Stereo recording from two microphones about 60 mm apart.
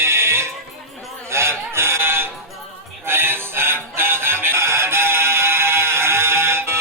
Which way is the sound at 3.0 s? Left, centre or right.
Right.